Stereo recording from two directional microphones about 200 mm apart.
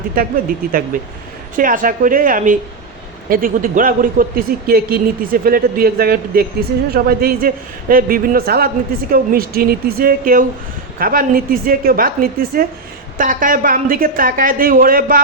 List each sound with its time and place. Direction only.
0.6 s a man's voice: 45° right (ahead or behind)